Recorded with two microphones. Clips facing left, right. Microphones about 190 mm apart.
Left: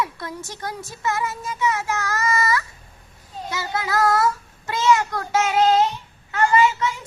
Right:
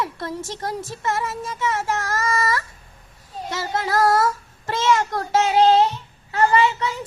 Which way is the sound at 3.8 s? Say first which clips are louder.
Right 2 dB; 30° right (ahead or behind).